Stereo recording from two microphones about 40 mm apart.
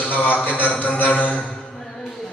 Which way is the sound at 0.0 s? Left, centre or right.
Left.